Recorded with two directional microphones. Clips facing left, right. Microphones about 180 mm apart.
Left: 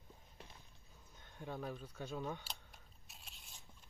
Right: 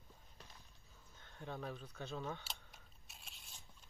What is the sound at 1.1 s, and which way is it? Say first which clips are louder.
Speech: left 1 dB; 10° left (ahead or behind).